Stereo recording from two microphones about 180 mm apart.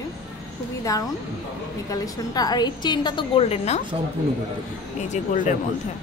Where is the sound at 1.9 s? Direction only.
20° left (ahead or behind).